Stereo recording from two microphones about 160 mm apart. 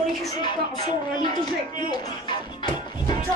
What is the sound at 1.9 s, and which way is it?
Music, 25° left (ahead or behind).